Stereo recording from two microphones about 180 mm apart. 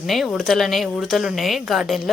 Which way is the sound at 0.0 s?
Centre (ahead or behind).